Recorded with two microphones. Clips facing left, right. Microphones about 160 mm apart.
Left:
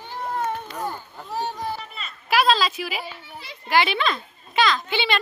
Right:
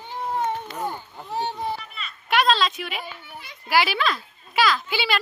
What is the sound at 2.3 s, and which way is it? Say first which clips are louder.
A woman's voice: left 1 dB; 5° left (ahead or behind).